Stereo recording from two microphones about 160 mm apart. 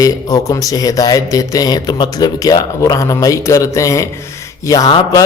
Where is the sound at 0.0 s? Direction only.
20° left (ahead or behind).